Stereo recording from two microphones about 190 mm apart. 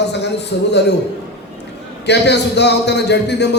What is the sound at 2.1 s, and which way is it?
Speech, 60° left (ahead or behind).